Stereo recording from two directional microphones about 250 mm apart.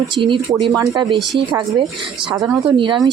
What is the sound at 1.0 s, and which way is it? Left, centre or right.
Speech, centre.